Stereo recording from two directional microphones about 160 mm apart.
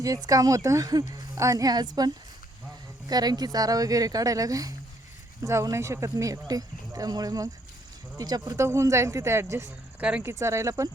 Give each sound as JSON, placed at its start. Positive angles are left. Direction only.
{"t": 0.0, "sound": "speech", "side_deg": -20}
{"t": 10.3, "sound": "speech", "side_deg": -20}